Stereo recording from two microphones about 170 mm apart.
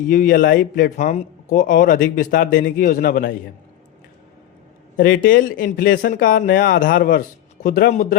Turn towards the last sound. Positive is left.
turn(degrees=65)  # may be behind; listen again after turning